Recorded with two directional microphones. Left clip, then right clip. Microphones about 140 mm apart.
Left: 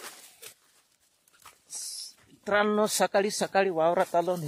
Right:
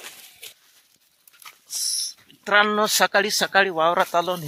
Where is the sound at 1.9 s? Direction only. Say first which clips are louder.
Right 13 dB; 15° left (ahead or behind).